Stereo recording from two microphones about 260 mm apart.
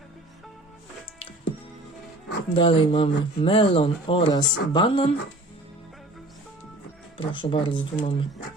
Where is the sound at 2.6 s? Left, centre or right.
Centre.